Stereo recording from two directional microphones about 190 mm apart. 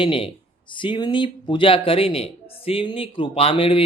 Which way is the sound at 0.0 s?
30° left (ahead or behind).